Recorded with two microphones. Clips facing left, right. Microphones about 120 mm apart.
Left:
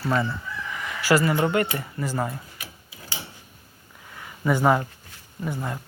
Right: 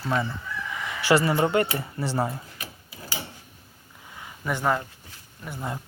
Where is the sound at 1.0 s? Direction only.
25° right (ahead or behind).